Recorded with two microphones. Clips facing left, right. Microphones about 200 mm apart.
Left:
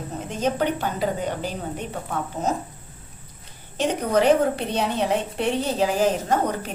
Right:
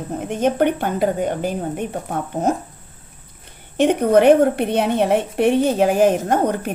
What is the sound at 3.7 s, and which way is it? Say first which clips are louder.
A woman's voice: right 7 dB; 60° right (ahead or behind).